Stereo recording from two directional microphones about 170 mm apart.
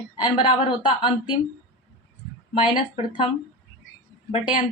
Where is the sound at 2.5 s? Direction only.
25° left (ahead or behind).